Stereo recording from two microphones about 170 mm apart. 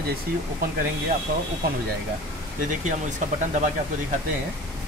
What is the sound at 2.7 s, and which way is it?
Speech, 45° right (ahead or behind).